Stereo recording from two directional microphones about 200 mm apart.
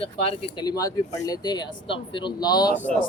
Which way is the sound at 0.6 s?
15° left (ahead or behind).